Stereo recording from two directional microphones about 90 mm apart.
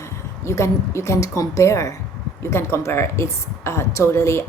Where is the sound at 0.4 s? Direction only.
35° left (ahead or behind).